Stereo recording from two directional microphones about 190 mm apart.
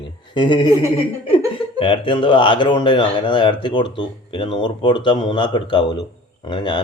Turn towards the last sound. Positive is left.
turn(degrees=25)  # may be behind; listen again after turning